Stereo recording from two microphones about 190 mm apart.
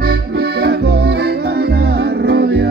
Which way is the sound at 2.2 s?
55° right (ahead or behind).